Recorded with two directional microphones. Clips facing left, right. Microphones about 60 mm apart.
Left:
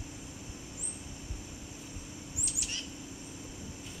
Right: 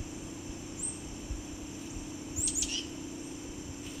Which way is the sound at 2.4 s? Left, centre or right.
Left.